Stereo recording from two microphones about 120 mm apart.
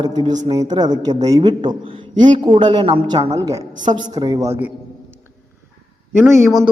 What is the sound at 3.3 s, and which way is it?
A man's voice, 30° right (ahead or behind).